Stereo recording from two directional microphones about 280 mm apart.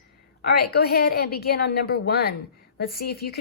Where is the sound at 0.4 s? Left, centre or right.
Left.